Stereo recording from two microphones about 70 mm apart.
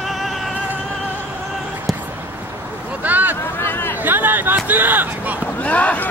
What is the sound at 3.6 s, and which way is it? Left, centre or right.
Chatter, left.